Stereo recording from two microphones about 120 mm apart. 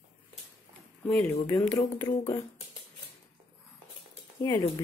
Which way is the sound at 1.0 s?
10° left (ahead or behind).